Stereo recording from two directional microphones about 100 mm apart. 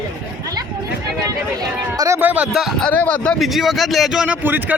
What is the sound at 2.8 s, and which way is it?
Speech, 15° left (ahead or behind).